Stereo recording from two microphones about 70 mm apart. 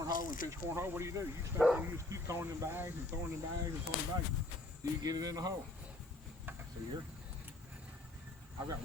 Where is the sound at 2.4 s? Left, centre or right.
Right.